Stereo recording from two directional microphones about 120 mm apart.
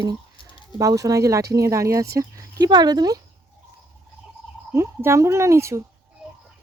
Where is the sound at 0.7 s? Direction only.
30° right (ahead or behind).